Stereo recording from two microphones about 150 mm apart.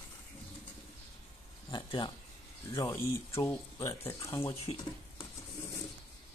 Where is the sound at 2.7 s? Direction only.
20° left (ahead or behind).